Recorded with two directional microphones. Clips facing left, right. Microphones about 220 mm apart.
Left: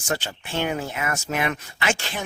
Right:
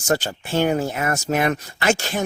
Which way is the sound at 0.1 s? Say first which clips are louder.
Right 6 dB; 45° right (ahead or behind).